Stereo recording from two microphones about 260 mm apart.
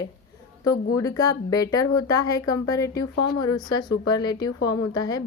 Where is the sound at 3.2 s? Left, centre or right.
Left.